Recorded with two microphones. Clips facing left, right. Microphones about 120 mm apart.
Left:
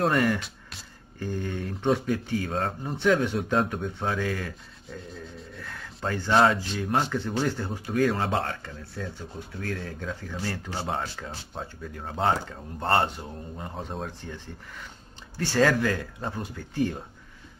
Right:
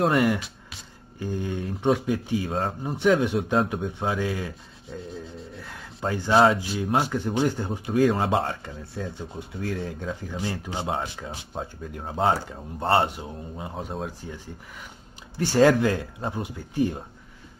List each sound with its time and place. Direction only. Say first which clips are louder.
0.0 s speech: right 2 dB; 5° right (ahead or behind)
1.2 s speech: right 2 dB; 15° right (ahead or behind)
5.6 s speech: right 2 dB; 10° right (ahead or behind)